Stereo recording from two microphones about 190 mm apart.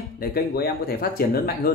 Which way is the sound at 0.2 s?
55° left (ahead or behind).